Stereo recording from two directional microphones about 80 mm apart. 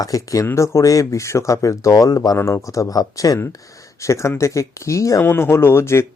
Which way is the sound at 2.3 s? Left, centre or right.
Left.